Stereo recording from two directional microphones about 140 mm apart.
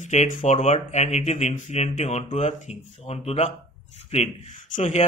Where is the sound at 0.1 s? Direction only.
60° left (ahead or behind).